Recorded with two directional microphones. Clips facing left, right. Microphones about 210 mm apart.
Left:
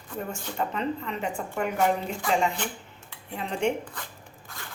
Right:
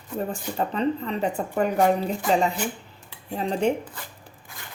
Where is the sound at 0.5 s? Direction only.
35° right (ahead or behind).